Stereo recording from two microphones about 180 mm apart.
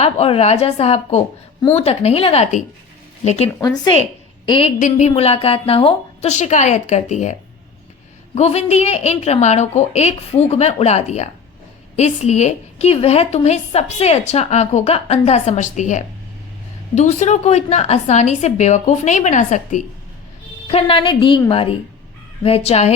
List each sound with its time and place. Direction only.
0.0 s a woman's voice: 35° left (ahead or behind)
4.8 s a woman's voice: 45° left (ahead or behind)
8.4 s a woman's voice: 35° left (ahead or behind)
20.7 s a woman's voice: 30° left (ahead or behind)